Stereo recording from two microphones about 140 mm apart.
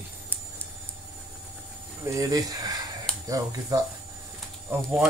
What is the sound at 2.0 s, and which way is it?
Speech, 25° right (ahead or behind).